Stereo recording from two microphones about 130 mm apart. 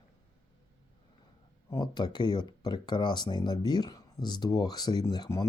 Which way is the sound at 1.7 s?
35° left (ahead or behind).